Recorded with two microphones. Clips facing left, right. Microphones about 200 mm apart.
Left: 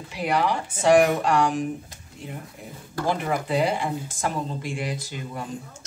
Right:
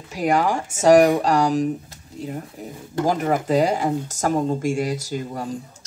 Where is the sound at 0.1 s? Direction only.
45° right (ahead or behind).